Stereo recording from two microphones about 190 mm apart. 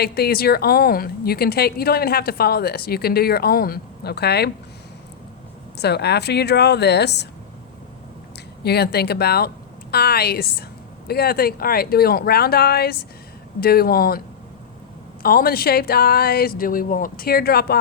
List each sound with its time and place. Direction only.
0.0 s speech: 55° left (ahead or behind)
5.7 s speech: 60° left (ahead or behind)
8.6 s speech: 60° left (ahead or behind)
15.2 s speech: 50° left (ahead or behind)